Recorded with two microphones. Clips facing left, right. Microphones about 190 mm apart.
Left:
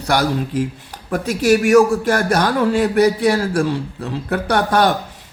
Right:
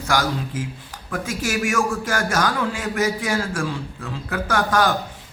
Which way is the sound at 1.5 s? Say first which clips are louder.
Left 12 dB; 40° left (ahead or behind).